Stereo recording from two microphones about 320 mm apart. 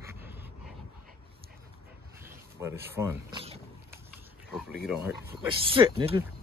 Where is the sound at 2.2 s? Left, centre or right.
Centre.